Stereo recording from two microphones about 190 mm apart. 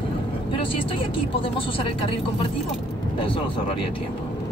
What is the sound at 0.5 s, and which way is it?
Speech, 30° left (ahead or behind).